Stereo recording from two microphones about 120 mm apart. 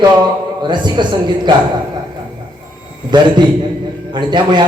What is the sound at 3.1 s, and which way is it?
Mantra, 40° right (ahead or behind).